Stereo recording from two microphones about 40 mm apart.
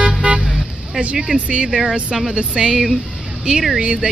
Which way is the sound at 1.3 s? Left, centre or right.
Right.